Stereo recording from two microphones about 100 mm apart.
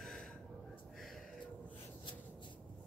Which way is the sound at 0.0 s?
5° left (ahead or behind).